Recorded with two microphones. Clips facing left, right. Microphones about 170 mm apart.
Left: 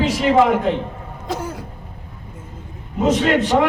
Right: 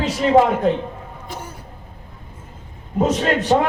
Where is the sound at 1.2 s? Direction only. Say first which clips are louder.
Left 9 dB; 90° left.